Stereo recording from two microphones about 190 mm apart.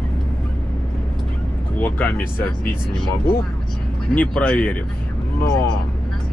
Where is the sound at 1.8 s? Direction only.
10° left (ahead or behind).